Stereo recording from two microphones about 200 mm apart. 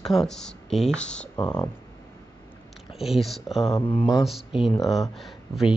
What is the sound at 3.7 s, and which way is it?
Speech, 25° left (ahead or behind).